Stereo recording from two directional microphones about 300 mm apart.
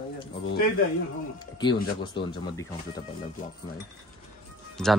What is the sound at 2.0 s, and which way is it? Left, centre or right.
Speech, centre.